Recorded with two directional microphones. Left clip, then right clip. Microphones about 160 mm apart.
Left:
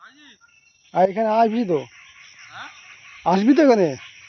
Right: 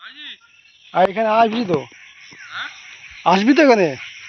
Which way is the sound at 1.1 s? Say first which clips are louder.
Right 3 dB; 20° left (ahead or behind).